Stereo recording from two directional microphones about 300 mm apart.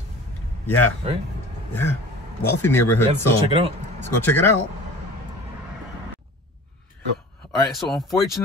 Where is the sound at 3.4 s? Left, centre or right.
Centre.